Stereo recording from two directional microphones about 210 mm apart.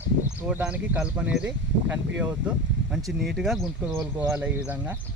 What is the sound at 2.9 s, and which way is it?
Speech, centre (ahead or behind).